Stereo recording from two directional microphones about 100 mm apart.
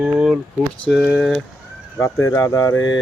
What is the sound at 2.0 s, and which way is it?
Speech, 25° left (ahead or behind).